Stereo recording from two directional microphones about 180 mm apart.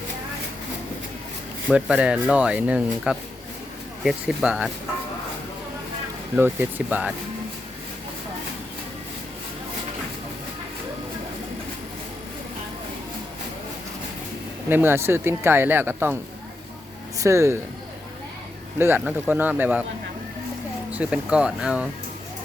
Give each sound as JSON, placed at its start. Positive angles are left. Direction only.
{"t": 1.7, "sound": "speech", "side_deg": -5}
{"t": 6.3, "sound": "speech", "side_deg": -10}
{"t": 14.7, "sound": "speech", "side_deg": -10}
{"t": 17.2, "sound": "speech", "side_deg": -15}
{"t": 18.8, "sound": "speech", "side_deg": -10}
{"t": 20.9, "sound": "speech", "side_deg": -5}